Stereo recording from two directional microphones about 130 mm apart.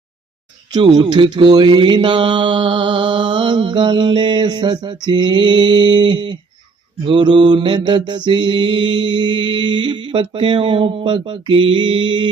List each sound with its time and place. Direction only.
0.7 s mantra: 35° right (ahead or behind)